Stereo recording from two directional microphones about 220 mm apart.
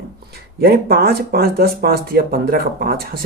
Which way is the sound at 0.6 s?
45° right (ahead or behind).